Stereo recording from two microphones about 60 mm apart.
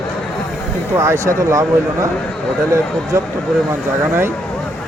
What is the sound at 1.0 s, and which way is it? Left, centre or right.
Speech, right.